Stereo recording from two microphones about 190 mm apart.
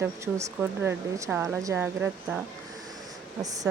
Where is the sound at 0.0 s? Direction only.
10° right (ahead or behind).